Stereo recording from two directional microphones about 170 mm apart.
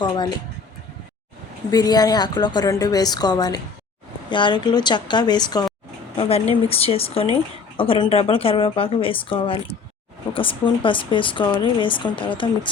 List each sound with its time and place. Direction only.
0.0 s speech: 25° left (ahead or behind)
1.7 s speech: 25° left (ahead or behind)
6.1 s speech: 35° left (ahead or behind)